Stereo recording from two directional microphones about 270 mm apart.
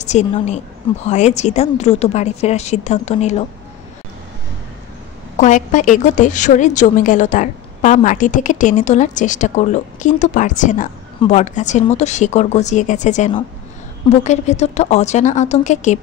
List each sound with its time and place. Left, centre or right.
0.0 s a woman's voice: left
5.4 s a woman's voice: left